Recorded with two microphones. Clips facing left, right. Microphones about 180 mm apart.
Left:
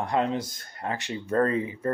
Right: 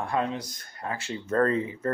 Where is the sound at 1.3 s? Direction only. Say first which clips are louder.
Even; 10° left (ahead or behind).